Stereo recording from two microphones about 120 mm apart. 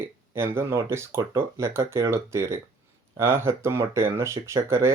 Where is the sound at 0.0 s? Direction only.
20° right (ahead or behind).